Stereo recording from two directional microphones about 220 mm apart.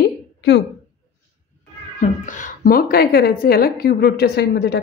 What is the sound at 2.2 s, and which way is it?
A woman's voice, 35° left (ahead or behind).